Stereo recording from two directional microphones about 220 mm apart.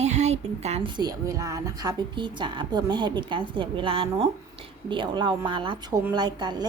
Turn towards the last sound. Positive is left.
turn(degrees=-20)  # may be behind; listen again after turning